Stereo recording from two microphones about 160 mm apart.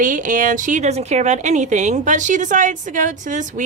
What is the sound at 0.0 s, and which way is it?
A woman's voice, 55° right (ahead or behind).